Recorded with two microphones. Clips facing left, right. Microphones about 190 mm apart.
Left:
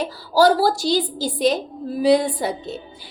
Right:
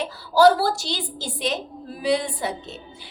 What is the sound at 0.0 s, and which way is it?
A woman's voice, 35° left (ahead or behind).